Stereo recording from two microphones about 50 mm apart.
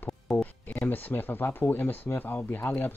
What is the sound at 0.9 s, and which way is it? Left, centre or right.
A man's voice, left.